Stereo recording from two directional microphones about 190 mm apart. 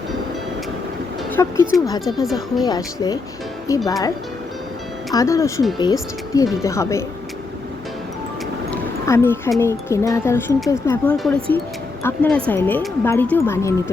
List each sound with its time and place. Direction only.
1.3 s speech: 15° left (ahead or behind)
2.2 s speech: centre (ahead or behind)
2.6 s speech: 20° left (ahead or behind)
5.1 s speech: 15° left (ahead or behind)
8.7 s music: 15° left (ahead or behind)
9.6 s speech: 15° left (ahead or behind)